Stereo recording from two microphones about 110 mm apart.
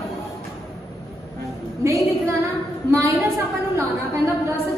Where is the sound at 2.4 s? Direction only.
30° right (ahead or behind).